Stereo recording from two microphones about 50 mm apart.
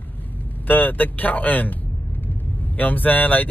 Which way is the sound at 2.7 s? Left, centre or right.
Left.